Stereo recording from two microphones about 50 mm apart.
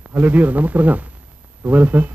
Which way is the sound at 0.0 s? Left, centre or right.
Right.